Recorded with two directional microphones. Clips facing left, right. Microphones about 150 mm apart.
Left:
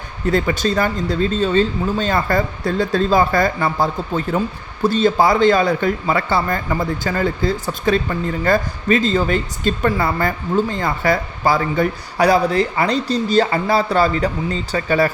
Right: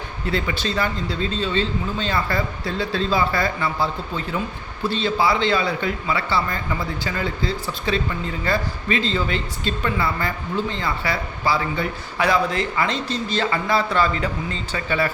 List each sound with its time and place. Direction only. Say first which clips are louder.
0.3 s speech: left 7 dB; 45° left (ahead or behind)